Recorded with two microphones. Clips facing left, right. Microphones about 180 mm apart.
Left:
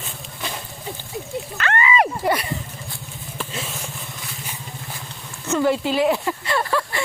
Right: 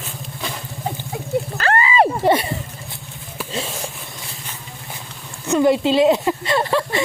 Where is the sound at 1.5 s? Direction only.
35° right (ahead or behind).